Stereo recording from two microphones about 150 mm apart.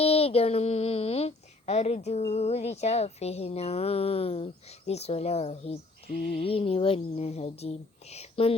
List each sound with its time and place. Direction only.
0.0 s speech: 40° left (ahead or behind)